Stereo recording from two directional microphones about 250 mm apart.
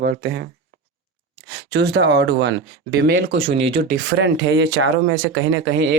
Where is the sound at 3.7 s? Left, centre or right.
Right.